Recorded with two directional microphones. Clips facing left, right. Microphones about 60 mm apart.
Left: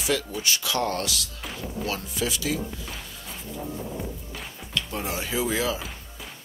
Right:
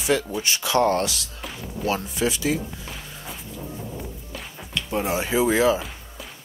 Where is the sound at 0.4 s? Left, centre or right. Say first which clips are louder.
Right 5 dB; right.